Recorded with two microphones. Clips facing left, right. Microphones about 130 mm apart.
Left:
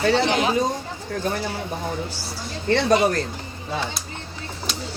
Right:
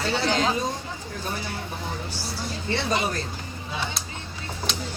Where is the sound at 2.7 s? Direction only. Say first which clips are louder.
Left 8 dB; 65° left (ahead or behind).